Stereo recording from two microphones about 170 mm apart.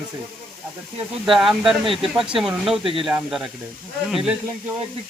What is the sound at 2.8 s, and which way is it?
Speech, 30° right (ahead or behind).